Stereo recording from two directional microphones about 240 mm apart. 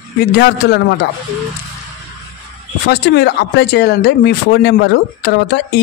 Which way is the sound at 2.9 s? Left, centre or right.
Left.